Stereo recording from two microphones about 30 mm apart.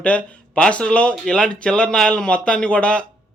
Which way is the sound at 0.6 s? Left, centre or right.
Left.